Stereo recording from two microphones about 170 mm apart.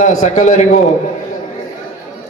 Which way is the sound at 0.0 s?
45° left (ahead or behind).